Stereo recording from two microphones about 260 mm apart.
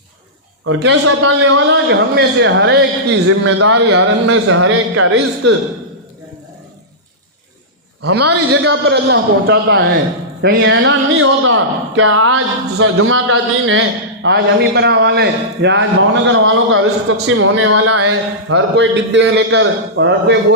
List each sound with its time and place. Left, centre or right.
0.6 s a man's voice: right
3.4 s a man's voice: right
8.3 s a man's voice: right